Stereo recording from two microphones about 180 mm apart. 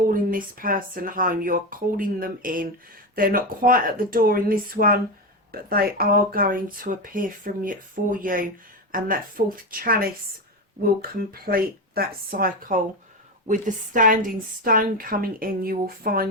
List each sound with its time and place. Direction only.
0.1 s speech: 50° right (ahead or behind)
11.2 s speech: 55° right (ahead or behind)